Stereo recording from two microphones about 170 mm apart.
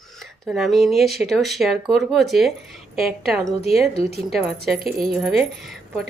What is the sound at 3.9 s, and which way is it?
Speech, 35° left (ahead or behind).